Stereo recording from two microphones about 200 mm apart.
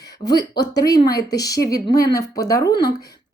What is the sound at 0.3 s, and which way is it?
A woman's voice, 20° left (ahead or behind).